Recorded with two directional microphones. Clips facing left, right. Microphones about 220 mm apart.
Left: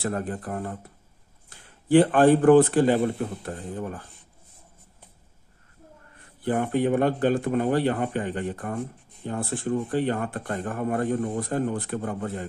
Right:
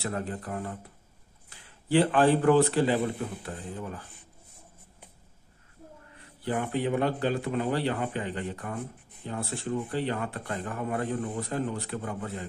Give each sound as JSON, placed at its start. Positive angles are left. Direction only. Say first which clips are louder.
{"t": 0.0, "sound": "a man's voice", "louder": "left 4 dB", "side_deg": 50}
{"t": 6.1, "sound": "speech", "louder": "left 5 dB", "side_deg": 50}